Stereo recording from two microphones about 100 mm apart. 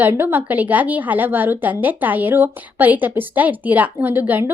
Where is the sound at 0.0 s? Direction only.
20° right (ahead or behind).